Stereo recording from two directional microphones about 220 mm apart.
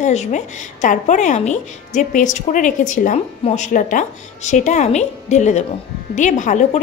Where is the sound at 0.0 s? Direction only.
30° left (ahead or behind).